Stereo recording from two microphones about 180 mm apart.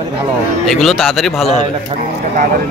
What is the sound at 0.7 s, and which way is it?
Speech, centre (ahead or behind).